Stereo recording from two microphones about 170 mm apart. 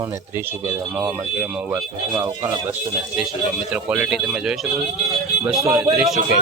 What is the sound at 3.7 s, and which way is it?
Speech, 5° right (ahead or behind).